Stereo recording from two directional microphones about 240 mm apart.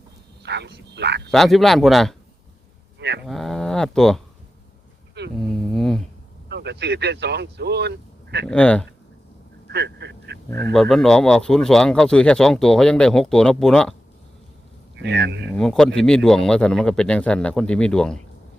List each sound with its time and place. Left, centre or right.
0.4 s speech: right
1.3 s speech: centre
3.2 s speech: centre
5.4 s a sound: centre
6.5 s speech: right
8.4 s speech: centre
9.7 s vehicle: right
10.5 s speech: centre
14.9 s speech: right
15.5 s speech: centre